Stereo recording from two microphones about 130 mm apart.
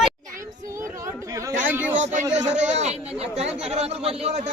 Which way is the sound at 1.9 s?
65° right (ahead or behind).